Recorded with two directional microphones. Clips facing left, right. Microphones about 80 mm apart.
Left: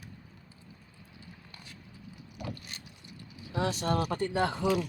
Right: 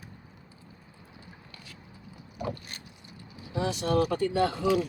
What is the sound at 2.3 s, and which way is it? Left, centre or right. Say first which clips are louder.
Vehicle: right 6 dB; right.